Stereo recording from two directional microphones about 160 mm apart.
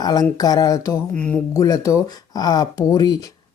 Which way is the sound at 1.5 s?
20° left (ahead or behind).